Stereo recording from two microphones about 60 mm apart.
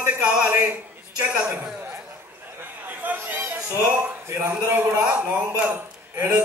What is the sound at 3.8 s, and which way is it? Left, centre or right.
Speech, right.